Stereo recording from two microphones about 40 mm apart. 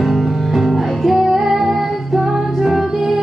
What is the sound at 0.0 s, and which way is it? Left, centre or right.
Music, centre.